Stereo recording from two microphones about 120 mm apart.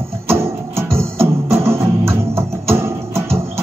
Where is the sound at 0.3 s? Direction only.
20° right (ahead or behind).